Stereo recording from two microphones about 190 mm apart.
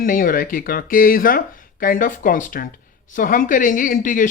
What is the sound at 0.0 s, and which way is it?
Speech, 45° left (ahead or behind).